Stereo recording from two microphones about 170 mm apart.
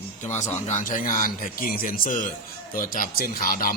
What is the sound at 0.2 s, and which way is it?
A man's voice, 45° left (ahead or behind).